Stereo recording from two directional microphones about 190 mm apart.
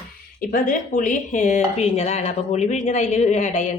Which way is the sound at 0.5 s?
45° left (ahead or behind).